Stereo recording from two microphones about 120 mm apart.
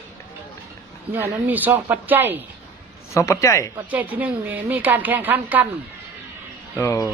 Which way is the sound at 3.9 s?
15° right (ahead or behind).